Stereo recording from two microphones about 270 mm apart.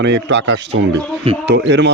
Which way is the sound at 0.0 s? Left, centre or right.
Right.